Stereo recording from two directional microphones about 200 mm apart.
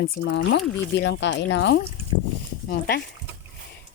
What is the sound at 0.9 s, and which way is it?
Speech, 60° left (ahead or behind).